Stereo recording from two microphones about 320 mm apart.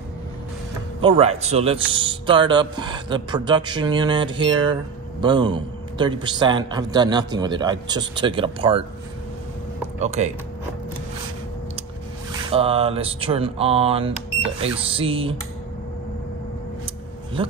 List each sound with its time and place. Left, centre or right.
1.0 s a man's voice: centre
9.9 s speech: right
12.3 s a man's voice: centre
17.4 s speech: centre